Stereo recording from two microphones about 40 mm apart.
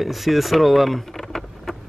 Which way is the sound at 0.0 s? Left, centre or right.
Centre.